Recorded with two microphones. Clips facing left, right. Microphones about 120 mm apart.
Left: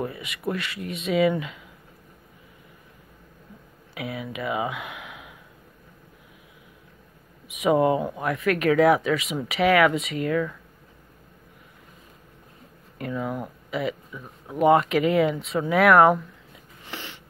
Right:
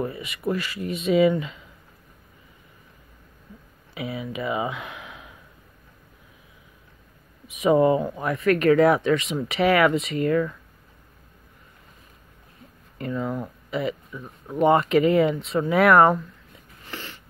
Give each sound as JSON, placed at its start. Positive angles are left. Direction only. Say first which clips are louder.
{"t": 0.0, "sound": "speech", "louder": "right 2 dB", "side_deg": 0}
{"t": 3.9, "sound": "speech", "louder": "right 2 dB", "side_deg": 0}
{"t": 7.4, "sound": "speech", "louder": "right 2 dB", "side_deg": 0}
{"t": 12.9, "sound": "speech", "louder": "right 1 dB", "side_deg": 5}
{"t": 16.8, "sound": "a sound", "louder": "even", "side_deg": 15}